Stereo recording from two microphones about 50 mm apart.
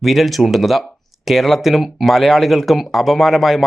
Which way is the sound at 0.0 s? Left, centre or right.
Centre.